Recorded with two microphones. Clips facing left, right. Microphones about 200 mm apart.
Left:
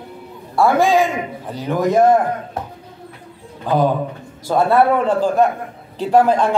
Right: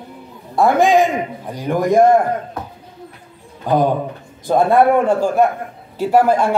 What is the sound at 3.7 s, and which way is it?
A man's voice, 15° right (ahead or behind).